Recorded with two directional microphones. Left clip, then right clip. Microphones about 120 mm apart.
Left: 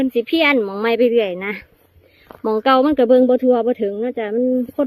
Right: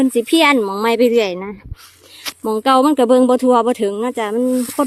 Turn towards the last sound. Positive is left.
turn(degrees=-10)  # may be behind; listen again after turning